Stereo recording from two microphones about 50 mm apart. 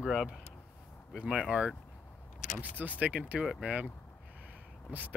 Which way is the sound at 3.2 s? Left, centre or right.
Centre.